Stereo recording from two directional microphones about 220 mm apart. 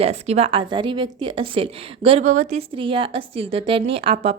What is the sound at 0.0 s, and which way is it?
A woman's voice, 30° right (ahead or behind).